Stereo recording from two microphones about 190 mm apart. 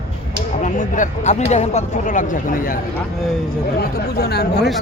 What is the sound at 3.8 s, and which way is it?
Speech, 55° left (ahead or behind).